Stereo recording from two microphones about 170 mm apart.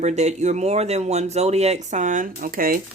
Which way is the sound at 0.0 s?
40° right (ahead or behind).